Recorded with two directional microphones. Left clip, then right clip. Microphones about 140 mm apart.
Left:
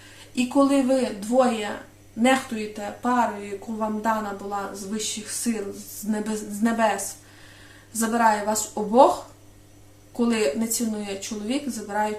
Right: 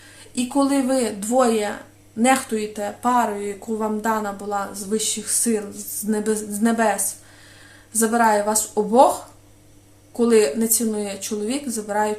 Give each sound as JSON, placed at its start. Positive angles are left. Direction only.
{"t": 0.3, "sound": "speech", "side_deg": -40}
{"t": 10.2, "sound": "speech", "side_deg": -45}